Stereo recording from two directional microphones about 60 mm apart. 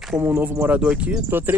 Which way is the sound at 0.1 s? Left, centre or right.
Right.